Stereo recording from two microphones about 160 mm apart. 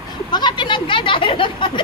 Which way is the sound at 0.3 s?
25° left (ahead or behind).